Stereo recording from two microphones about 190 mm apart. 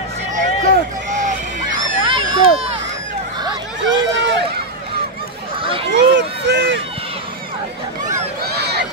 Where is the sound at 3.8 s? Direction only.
75° right (ahead or behind).